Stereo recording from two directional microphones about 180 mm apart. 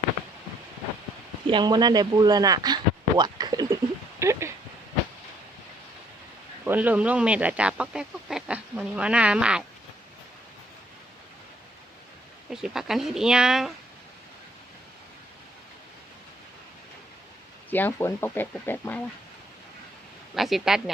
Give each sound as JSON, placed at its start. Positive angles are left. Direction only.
{"t": 1.5, "sound": "speech", "side_deg": -25}
{"t": 4.2, "sound": "a sound", "side_deg": -15}
{"t": 6.7, "sound": "speech", "side_deg": -10}
{"t": 12.5, "sound": "speech", "side_deg": -5}
{"t": 17.7, "sound": "speech", "side_deg": 10}
{"t": 20.3, "sound": "speech", "side_deg": 0}